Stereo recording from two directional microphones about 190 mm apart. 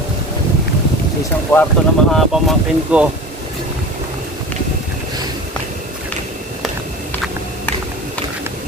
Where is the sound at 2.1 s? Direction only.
5° right (ahead or behind).